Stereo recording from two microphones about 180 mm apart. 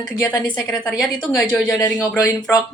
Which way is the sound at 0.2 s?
10° left (ahead or behind).